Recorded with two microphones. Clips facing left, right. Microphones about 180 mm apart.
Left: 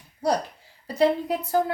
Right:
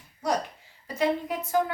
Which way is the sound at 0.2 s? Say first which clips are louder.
Left 4 dB; 35° left (ahead or behind).